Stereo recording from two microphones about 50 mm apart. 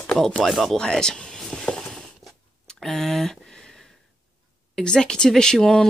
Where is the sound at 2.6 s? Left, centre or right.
Centre.